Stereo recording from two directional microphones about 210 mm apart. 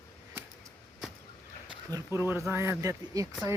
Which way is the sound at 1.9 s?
10° right (ahead or behind).